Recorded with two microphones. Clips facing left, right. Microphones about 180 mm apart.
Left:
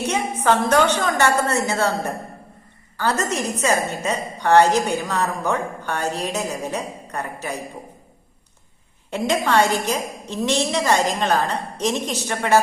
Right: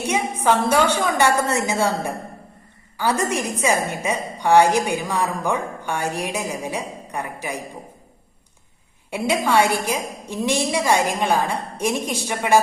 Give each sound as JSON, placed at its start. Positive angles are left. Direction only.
{"t": 0.1, "sound": "a woman's voice", "side_deg": -10}
{"t": 9.0, "sound": "a woman's voice", "side_deg": -10}